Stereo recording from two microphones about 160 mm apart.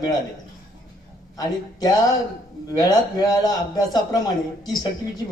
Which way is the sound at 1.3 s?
25° left (ahead or behind).